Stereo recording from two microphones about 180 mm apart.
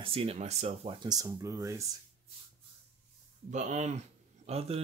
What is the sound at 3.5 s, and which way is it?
Speech, 40° right (ahead or behind).